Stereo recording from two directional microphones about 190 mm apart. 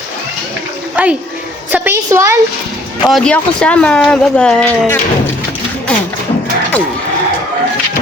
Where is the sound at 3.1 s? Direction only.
Centre (ahead or behind).